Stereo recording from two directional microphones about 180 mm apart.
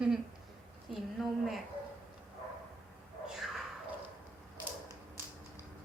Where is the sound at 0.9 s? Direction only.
Centre (ahead or behind).